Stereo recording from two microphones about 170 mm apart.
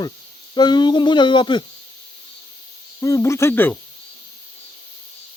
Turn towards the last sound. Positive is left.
turn(degrees=10)  # may be behind; listen again after turning